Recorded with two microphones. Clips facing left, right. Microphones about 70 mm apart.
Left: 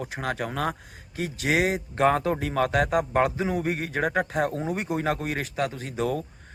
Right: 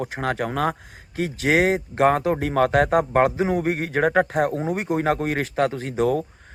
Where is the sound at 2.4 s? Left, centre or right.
Right.